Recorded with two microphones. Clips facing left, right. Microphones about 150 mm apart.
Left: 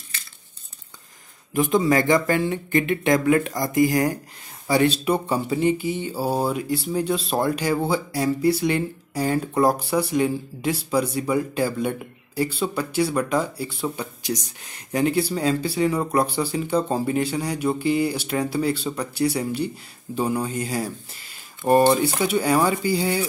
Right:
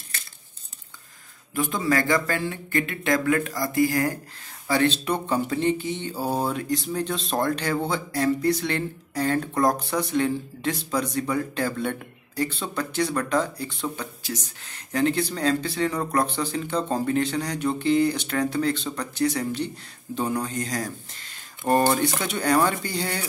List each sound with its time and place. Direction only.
1.5 s speech: 20° left (ahead or behind)